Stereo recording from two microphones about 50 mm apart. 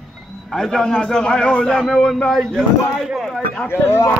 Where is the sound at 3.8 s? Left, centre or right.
Left.